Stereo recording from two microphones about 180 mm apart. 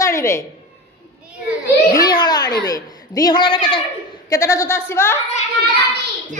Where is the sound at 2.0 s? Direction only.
20° left (ahead or behind).